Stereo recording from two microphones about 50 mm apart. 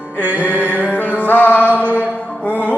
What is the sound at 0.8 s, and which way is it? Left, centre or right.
Music, left.